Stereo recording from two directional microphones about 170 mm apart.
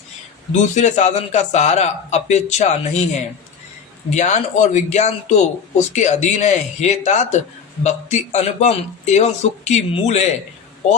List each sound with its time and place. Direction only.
0.5 s a man's voice: 45° left (ahead or behind)